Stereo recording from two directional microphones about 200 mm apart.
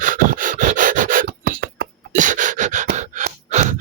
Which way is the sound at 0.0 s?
40° right (ahead or behind).